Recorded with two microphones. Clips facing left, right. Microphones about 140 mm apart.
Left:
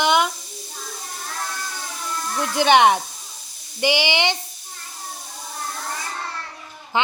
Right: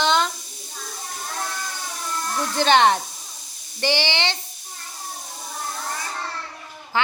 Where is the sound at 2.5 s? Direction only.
15° left (ahead or behind).